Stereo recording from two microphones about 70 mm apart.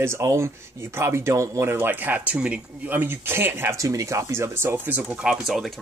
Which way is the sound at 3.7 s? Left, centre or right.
Right.